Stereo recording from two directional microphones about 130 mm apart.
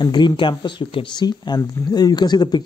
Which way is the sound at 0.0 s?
35° left (ahead or behind).